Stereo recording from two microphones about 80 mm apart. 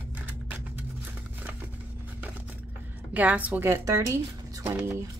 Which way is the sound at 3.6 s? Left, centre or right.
Right.